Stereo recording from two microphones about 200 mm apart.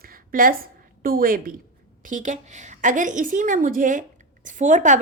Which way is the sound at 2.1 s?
40° right (ahead or behind).